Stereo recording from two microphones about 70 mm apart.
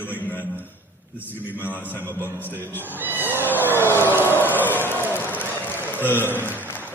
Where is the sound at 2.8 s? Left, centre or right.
Right.